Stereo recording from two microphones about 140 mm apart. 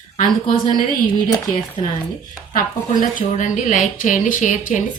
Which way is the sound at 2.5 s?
70° left (ahead or behind).